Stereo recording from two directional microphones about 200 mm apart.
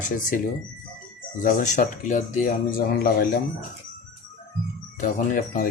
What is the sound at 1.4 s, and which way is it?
Speech, 40° left (ahead or behind).